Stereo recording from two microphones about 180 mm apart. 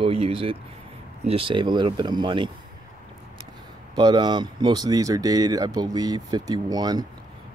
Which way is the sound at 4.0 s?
25° right (ahead or behind).